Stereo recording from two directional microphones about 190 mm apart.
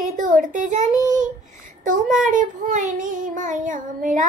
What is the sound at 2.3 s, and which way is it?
Child singing, 45° right (ahead or behind).